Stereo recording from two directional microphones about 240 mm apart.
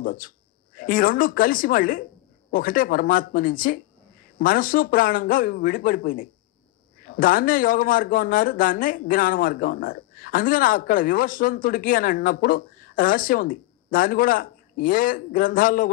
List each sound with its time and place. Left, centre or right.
0.0 s speech: left